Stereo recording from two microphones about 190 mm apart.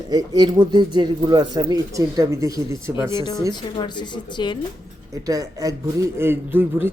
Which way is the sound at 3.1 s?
20° left (ahead or behind).